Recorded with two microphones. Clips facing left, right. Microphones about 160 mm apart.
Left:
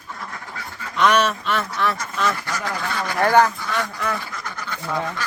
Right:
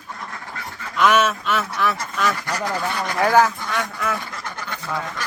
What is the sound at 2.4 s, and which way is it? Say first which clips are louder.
Speech: right 3 dB; 15° right (ahead or behind).